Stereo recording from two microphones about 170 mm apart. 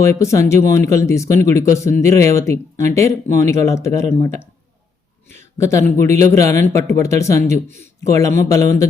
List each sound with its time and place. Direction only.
0.0 s speech: 15° left (ahead or behind)
5.4 s speech: 15° left (ahead or behind)